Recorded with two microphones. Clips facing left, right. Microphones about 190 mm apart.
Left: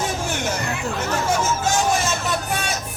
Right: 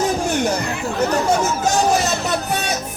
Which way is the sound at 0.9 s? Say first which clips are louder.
Right 6 dB; 40° right (ahead or behind).